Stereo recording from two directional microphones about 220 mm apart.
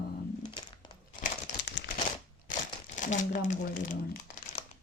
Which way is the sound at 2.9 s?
35° left (ahead or behind).